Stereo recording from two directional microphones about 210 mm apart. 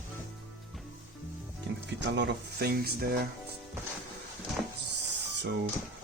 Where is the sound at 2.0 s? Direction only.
55° right (ahead or behind).